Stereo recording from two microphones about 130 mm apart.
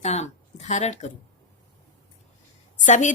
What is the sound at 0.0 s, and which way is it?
Speech, 60° left (ahead or behind).